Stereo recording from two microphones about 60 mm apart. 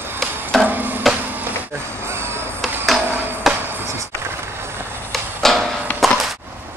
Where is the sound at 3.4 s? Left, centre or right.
Centre.